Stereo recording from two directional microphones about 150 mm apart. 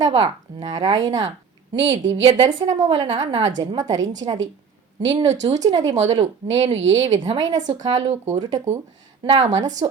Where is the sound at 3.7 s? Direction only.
25° right (ahead or behind).